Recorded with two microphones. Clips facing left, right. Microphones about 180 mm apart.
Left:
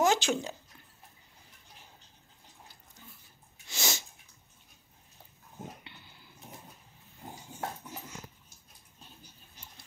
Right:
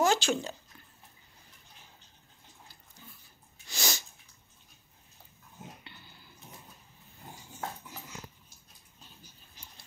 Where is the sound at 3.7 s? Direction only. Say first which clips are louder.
Even; 25° left (ahead or behind).